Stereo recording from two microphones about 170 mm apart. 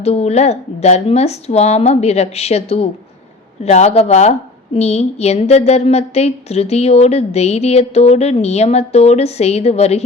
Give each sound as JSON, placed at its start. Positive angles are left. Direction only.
{"t": 0.0, "sound": "a woman's voice", "side_deg": 40}